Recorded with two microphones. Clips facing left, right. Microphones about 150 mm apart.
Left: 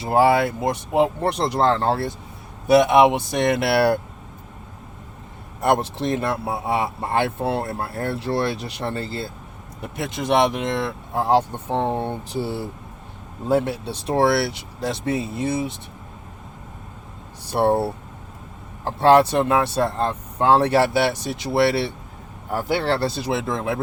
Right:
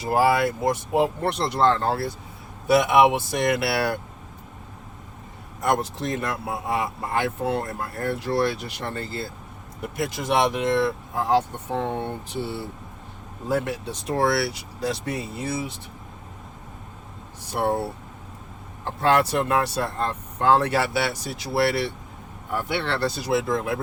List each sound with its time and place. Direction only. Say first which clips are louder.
0.0 s speech: left 3 dB; 25° left (ahead or behind)
1.3 s speech: left 1 dB; 35° left (ahead or behind)
5.5 s speech: left 4 dB; 30° left (ahead or behind)
13.5 s speech: left 5 dB; 30° left (ahead or behind)
17.5 s speech: left 5 dB; 30° left (ahead or behind)
18.9 s speech: left 6 dB; 30° left (ahead or behind)
22.4 s speech: left 5 dB; 40° left (ahead or behind)